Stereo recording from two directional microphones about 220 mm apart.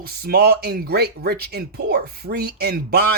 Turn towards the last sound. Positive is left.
turn(degrees=-45)  # may be behind; listen again after turning